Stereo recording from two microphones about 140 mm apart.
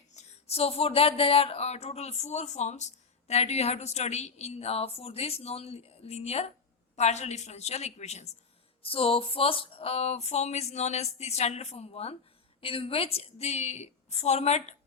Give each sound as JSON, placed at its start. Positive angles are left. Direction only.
{"t": 0.2, "sound": "speech", "side_deg": 50}
{"t": 8.8, "sound": "speech", "side_deg": 40}